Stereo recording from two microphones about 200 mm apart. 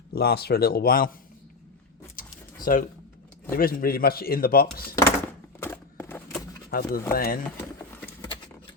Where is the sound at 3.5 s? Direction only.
45° left (ahead or behind).